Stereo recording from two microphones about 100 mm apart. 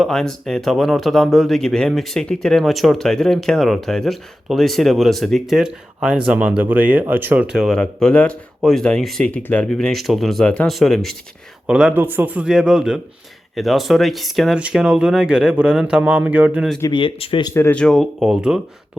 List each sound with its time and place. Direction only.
0.0 s speech: 5° left (ahead or behind); by 7.4 s 20° right (ahead or behind)
7.5 s speech: centre (ahead or behind)
10.4 s speech: 10° left (ahead or behind)
10.7 s speech: centre (ahead or behind)
11.6 s speech: 10° right (ahead or behind)
16.9 s speech: 60° left (ahead or behind)
17.5 s speech: 20° left (ahead or behind)
17.7 s speech: 5° left (ahead or behind)